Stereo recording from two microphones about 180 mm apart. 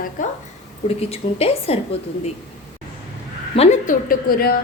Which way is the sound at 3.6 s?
45° left (ahead or behind).